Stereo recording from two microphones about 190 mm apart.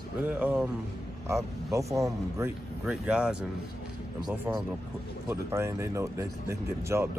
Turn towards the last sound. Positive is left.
turn(degrees=-15)  # may be behind; listen again after turning